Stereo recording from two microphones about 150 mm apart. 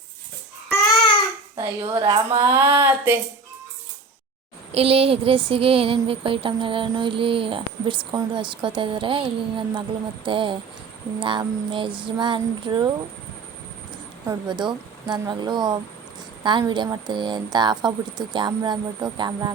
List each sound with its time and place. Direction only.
1.5 s speech: 35° right (ahead or behind); by 3.2 s 15° right (ahead or behind)
4.7 s a sound: 40° right (ahead or behind)
14.3 s speech: 30° right (ahead or behind)